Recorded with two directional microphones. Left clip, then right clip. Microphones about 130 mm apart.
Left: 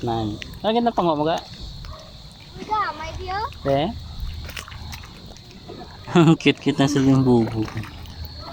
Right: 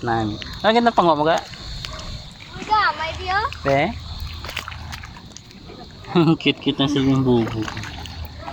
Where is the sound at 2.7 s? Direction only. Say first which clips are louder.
Right 6 dB; 25° right (ahead or behind).